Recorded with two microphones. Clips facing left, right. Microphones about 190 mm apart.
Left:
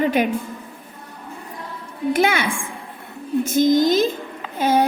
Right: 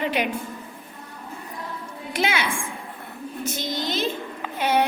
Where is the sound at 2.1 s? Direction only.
55° left (ahead or behind).